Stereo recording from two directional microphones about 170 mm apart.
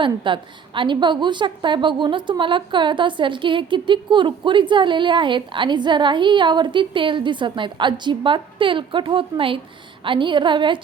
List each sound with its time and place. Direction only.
0.3 s a woman's voice: 30° right (ahead or behind)